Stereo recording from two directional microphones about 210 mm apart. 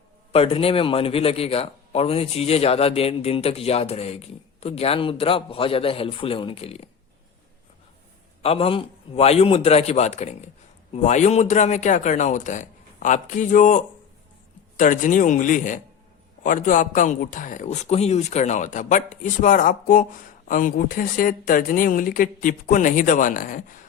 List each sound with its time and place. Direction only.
0.3 s a man's voice: 25° left (ahead or behind)
8.4 s a man's voice: 25° left (ahead or behind)